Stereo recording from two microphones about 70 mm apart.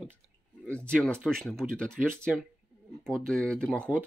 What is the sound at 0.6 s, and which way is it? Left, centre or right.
Speech, centre.